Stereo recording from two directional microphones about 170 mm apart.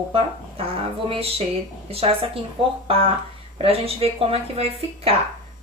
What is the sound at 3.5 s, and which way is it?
A woman's voice, 35° right (ahead or behind).